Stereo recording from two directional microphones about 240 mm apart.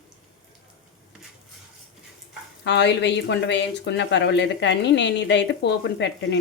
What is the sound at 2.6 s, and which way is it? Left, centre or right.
A woman's voice, left.